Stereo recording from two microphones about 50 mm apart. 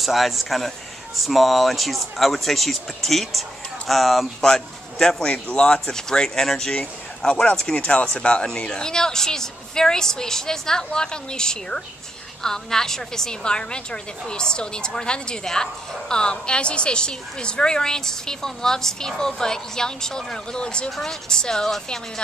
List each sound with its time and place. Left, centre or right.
0.0 s a woman's voice: centre